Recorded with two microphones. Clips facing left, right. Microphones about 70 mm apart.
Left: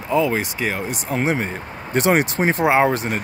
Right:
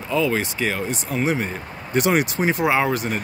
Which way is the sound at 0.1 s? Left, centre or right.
Left.